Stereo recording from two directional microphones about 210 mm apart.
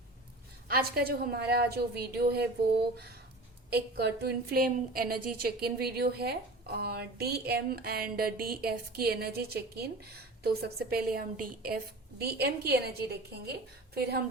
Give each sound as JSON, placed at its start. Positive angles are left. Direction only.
{"t": 0.7, "sound": "a woman's voice", "side_deg": -45}
{"t": 3.7, "sound": "a woman's voice", "side_deg": -50}